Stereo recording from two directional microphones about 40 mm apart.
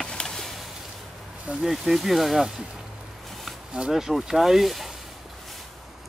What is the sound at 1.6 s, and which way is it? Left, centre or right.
Speech, centre.